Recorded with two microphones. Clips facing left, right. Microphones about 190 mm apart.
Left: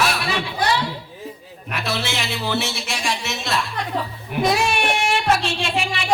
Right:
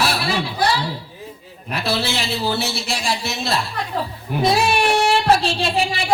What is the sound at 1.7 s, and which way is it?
A man's voice, 35° right (ahead or behind).